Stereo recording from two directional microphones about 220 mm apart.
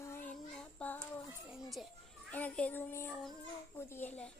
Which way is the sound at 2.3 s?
5° left (ahead or behind).